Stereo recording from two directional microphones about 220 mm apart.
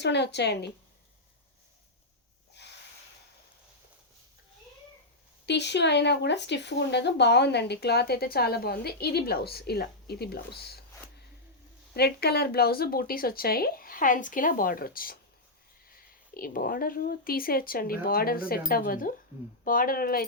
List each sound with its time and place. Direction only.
0.0 s speech: 50° left (ahead or behind)
5.5 s speech: 50° left (ahead or behind)
11.9 s speech: 45° left (ahead or behind)
16.3 s speech: 40° left (ahead or behind)